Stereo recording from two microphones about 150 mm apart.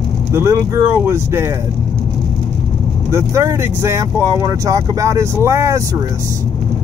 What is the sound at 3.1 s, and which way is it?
Speech, 20° right (ahead or behind).